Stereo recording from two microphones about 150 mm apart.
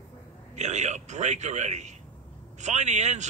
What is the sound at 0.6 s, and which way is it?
A man's voice, 50° right (ahead or behind).